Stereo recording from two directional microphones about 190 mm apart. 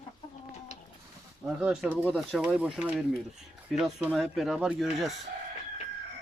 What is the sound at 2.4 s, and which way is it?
Speech, 5° right (ahead or behind).